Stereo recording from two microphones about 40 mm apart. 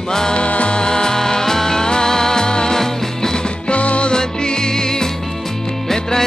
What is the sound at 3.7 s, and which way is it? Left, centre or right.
Music, left.